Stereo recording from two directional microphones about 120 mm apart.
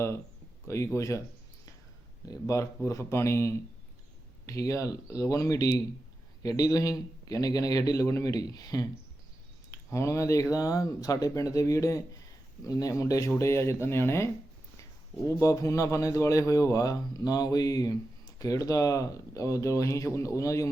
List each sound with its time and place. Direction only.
0.9 s speech: 25° left (ahead or behind)
2.2 s speech: 30° left (ahead or behind)
9.9 s speech: 25° left (ahead or behind)
15.4 s speech: 25° left (ahead or behind)